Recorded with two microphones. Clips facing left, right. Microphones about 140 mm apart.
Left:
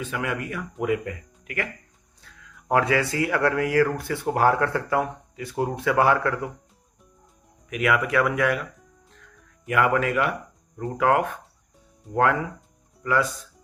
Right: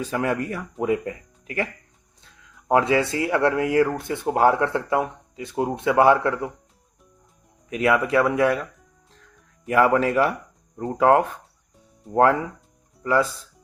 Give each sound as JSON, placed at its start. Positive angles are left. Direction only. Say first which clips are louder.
{"t": 0.0, "sound": "speech", "louder": "right 5 dB", "side_deg": -35}
{"t": 7.7, "sound": "speech", "louder": "right 3 dB", "side_deg": -30}
{"t": 9.6, "sound": "speech", "louder": "right 3 dB", "side_deg": -30}